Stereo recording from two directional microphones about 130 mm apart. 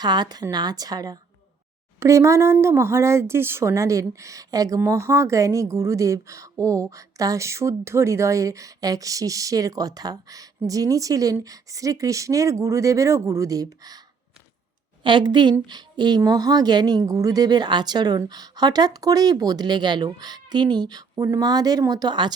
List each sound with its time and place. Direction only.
0.0 s a woman's voice: 35° right (ahead or behind)
15.0 s a woman's voice: 35° right (ahead or behind)